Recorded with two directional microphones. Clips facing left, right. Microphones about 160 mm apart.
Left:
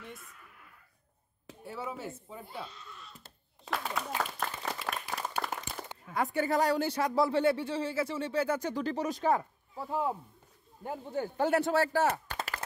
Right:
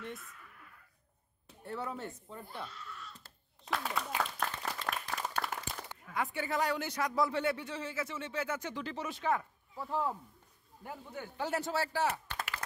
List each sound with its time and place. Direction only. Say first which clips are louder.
0.0 s a sound: right 3 dB; centre (ahead or behind)
1.6 s speech: left 1 dB; 5° left (ahead or behind)
2.9 s a sound: right 1 dB; 20° left (ahead or behind)
3.7 s applause: left 1 dB; centre (ahead or behind)
6.1 s speech: left 6 dB; 40° left (ahead or behind)
9.8 s speech: left 3 dB; 15° left (ahead or behind)
10.8 s speech: left 9 dB; 30° left (ahead or behind)
11.3 s speech: left 7 dB; 60° left (ahead or behind)